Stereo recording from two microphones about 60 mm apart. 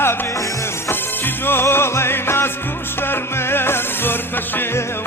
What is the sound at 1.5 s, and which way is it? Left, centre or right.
Music, left.